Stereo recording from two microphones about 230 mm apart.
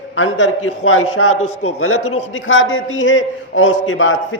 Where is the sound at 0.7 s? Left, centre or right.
Left.